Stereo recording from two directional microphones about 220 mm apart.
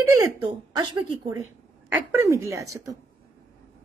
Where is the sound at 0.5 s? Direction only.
20° right (ahead or behind).